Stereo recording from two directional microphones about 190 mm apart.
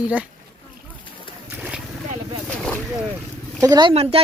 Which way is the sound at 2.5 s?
5° left (ahead or behind).